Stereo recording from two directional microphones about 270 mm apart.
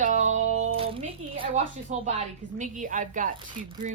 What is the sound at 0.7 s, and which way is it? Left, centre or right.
A woman's voice, right.